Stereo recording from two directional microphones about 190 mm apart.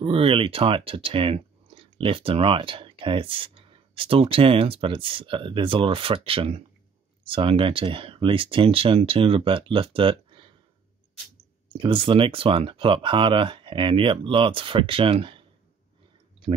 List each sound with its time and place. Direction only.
0.0 s speech: 30° right (ahead or behind)
11.7 s speech: 25° right (ahead or behind)